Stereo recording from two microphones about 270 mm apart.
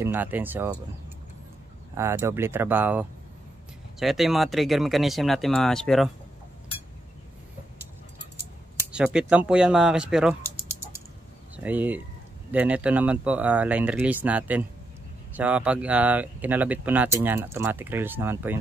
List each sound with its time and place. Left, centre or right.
0.0 s speech: centre
2.0 s speech: centre
8.9 s speech: centre
11.5 s speech: centre